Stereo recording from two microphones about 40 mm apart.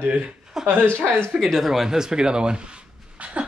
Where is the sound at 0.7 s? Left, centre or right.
Right.